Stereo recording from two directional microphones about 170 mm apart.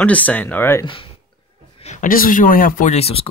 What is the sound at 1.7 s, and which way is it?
Speech, 45° left (ahead or behind).